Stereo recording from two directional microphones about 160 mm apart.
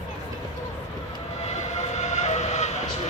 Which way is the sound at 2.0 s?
45° left (ahead or behind).